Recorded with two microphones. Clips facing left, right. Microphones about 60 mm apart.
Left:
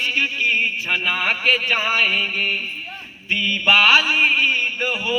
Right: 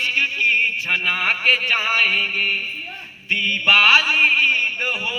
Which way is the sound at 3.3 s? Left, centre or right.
Right.